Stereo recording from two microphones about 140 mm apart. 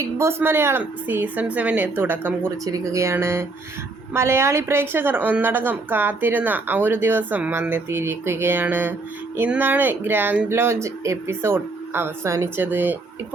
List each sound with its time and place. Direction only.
0.0 s a woman's voice: 20° right (ahead or behind)